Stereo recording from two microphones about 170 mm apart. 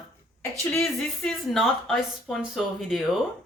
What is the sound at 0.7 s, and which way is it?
Speech, 5° left (ahead or behind).